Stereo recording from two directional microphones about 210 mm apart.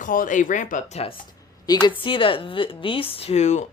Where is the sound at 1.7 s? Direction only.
20° left (ahead or behind).